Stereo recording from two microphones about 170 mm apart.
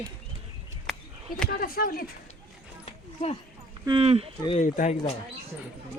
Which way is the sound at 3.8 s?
30° right (ahead or behind).